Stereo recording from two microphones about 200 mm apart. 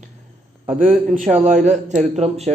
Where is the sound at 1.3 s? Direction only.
35° right (ahead or behind).